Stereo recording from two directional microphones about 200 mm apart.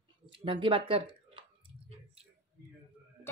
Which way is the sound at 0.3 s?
25° right (ahead or behind).